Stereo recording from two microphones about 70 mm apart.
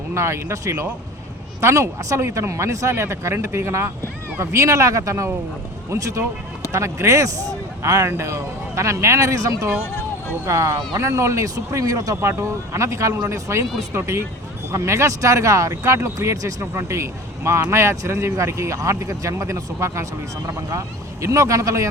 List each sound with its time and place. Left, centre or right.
0.1 s speech: right